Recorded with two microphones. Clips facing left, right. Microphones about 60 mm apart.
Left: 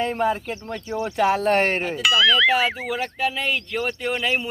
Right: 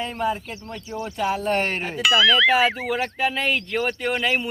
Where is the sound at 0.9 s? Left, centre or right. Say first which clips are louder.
Left 4 dB; left.